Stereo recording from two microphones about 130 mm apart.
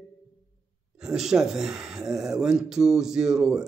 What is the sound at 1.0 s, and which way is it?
Speech, 5° right (ahead or behind).